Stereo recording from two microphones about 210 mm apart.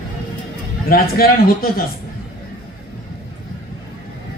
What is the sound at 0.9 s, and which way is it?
Speech, 45° left (ahead or behind).